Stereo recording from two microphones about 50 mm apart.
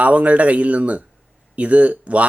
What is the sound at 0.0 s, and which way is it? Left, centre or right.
Speech, right.